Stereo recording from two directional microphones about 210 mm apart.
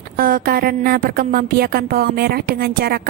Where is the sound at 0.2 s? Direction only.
45° right (ahead or behind).